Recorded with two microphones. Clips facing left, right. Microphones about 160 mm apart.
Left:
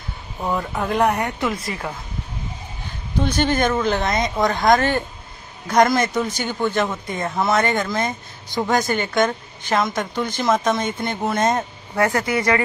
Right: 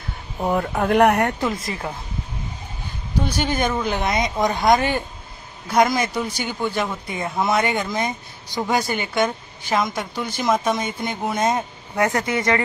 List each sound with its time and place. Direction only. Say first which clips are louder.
0.5 s speech: right 3 dB; 50° right (ahead or behind)
1.4 s speech: even; 25° right (ahead or behind)
3.3 s a woman's voice: left 4 dB; 10° right (ahead or behind)
12.0 s speech: left 1 dB; 25° right (ahead or behind)